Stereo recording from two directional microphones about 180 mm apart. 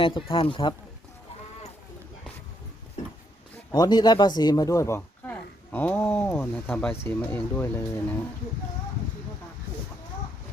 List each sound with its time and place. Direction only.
0.0 s speech: 30° left (ahead or behind)
3.7 s speech: 20° left (ahead or behind)